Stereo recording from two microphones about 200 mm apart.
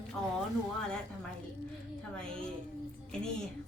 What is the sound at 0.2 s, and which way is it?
Speech, 5° left (ahead or behind).